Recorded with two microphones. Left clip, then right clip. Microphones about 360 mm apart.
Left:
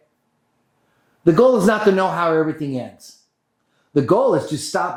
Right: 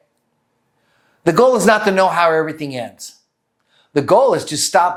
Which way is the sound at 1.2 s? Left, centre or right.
Right.